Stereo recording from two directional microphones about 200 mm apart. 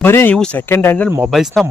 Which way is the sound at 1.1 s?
5° right (ahead or behind).